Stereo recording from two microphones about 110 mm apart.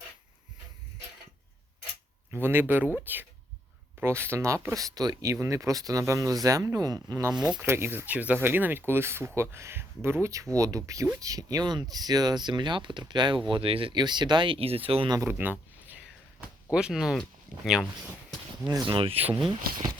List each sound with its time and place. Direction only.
2.3 s speech: 20° right (ahead or behind)
7.3 s speech: 10° right (ahead or behind)
7.6 s speech: 20° right (ahead or behind); by 13.4 s 45° right (ahead or behind)
13.5 s speech: 55° right (ahead or behind)
15.3 s speech: 20° right (ahead or behind)
16.7 s speech: 5° right (ahead or behind)
18.9 s speech: 55° right (ahead or behind)